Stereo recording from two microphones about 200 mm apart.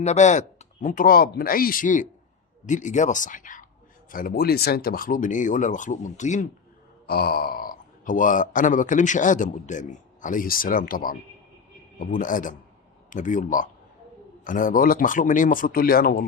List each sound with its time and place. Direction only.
0.0 s speech: 35° left (ahead or behind)
7.1 s speech: 50° left (ahead or behind)